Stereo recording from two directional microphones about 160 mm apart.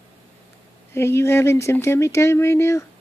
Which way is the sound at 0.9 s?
15° left (ahead or behind).